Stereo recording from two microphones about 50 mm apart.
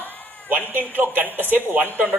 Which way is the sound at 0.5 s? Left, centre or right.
Right.